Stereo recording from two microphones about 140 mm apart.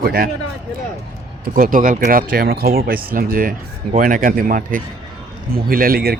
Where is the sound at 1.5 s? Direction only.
70° right (ahead or behind).